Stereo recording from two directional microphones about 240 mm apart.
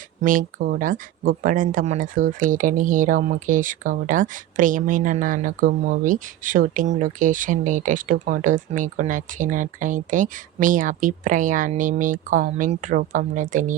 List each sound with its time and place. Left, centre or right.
0.2 s speech: right